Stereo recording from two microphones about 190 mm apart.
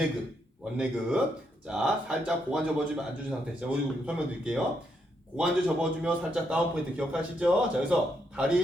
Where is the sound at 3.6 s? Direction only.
5° right (ahead or behind).